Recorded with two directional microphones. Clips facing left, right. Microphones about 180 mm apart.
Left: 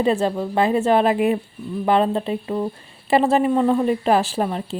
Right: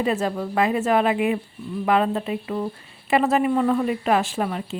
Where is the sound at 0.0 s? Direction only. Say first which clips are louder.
Left 4 dB; 30° left (ahead or behind).